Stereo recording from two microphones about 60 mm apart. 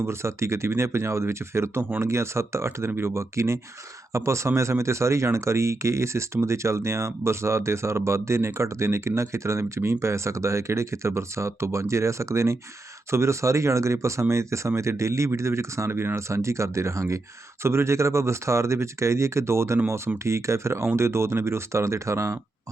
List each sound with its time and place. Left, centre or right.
0.0 s speech: right